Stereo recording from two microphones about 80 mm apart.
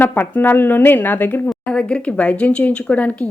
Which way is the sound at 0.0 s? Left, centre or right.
Left.